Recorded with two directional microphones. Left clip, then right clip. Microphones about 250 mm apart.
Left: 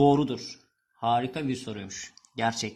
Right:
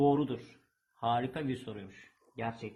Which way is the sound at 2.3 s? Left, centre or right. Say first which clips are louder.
Left 10 dB; left.